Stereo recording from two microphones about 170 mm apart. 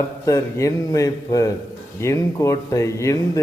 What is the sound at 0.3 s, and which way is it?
Speech, 20° left (ahead or behind).